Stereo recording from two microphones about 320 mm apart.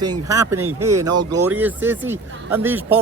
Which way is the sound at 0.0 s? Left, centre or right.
Centre.